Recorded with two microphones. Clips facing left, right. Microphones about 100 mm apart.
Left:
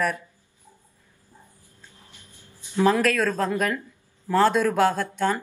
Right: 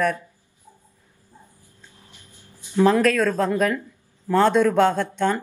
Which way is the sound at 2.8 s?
5° left (ahead or behind).